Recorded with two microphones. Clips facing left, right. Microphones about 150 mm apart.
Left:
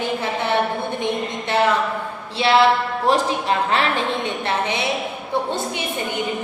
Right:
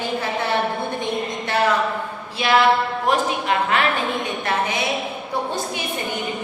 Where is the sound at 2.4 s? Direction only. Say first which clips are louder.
Left 1 dB; 30° left (ahead or behind).